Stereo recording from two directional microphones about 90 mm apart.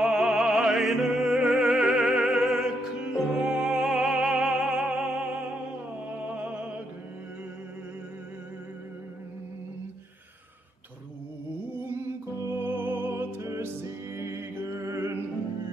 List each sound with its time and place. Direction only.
0.0 s opera: 10° right (ahead or behind)
6.2 s music: 15° right (ahead or behind)
11.9 s music: 30° right (ahead or behind)